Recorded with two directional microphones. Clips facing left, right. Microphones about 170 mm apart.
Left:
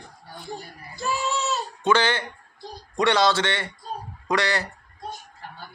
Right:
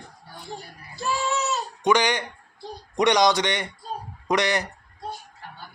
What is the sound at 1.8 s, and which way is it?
A man's voice, 15° right (ahead or behind).